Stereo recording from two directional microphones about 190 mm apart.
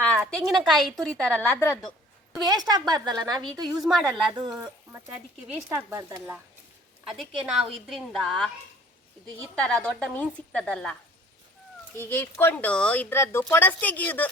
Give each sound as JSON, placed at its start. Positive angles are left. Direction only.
{"t": 0.3, "sound": "a woman's voice", "side_deg": 0}
{"t": 2.4, "sound": "a woman's voice", "side_deg": -20}
{"t": 3.8, "sound": "a woman's voice", "side_deg": 0}
{"t": 4.3, "sound": "a woman's voice", "side_deg": -25}
{"t": 5.6, "sound": "speech", "side_deg": -15}
{"t": 7.0, "sound": "a woman's voice", "side_deg": 0}
{"t": 9.6, "sound": "a woman's voice", "side_deg": 5}
{"t": 11.9, "sound": "speech", "side_deg": 10}